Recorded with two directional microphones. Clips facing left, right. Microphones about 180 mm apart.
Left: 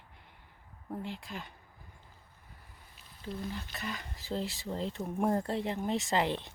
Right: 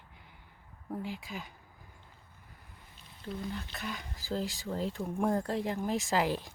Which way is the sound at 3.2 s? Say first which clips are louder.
Even; centre (ahead or behind).